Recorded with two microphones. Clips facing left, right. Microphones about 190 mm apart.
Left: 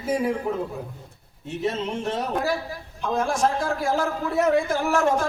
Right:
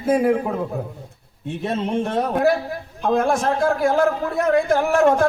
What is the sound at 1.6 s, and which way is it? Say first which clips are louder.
A man's voice: right 4 dB; 55° right (ahead or behind).